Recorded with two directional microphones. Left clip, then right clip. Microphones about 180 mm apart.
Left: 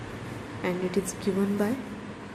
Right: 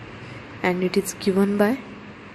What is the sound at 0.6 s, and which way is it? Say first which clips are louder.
A woman's voice: right 7 dB; 40° right (ahead or behind).